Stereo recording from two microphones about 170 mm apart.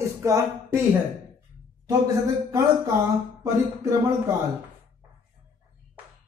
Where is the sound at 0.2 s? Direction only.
20° right (ahead or behind).